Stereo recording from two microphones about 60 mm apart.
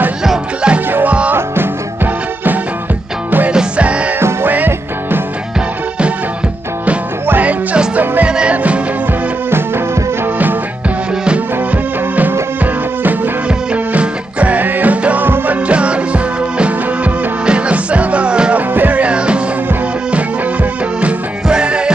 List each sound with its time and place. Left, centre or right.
0.2 s music: centre
1.3 s music: right
3.3 s music: right
3.5 s music: centre
4.2 s music: right
7.2 s music: right
7.7 s music: centre
8.0 s music: right
8.3 s music: centre
11.2 s music: right
13.9 s music: right
15.7 s music: centre
18.7 s music: right
21.0 s music: centre